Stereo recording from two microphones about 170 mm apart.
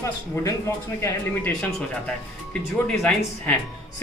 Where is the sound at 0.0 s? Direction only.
20° left (ahead or behind).